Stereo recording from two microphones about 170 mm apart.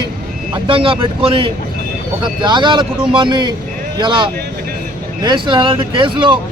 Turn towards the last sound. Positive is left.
turn(degrees=-30)  # may be behind; listen again after turning